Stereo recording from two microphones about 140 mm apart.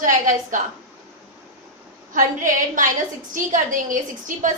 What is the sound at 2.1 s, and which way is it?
A woman's voice, 70° right (ahead or behind).